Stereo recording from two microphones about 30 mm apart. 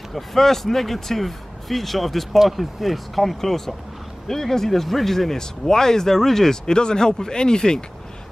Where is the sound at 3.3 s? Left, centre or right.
Centre.